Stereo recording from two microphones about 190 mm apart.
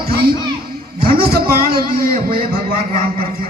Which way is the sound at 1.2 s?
50° right (ahead or behind).